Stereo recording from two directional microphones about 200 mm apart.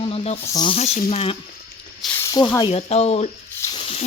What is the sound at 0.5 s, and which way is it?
Speech, 25° left (ahead or behind).